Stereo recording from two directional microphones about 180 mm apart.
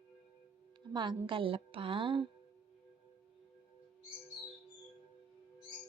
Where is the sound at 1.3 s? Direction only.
30° right (ahead or behind).